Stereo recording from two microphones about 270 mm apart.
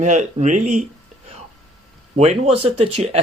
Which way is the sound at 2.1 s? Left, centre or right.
Right.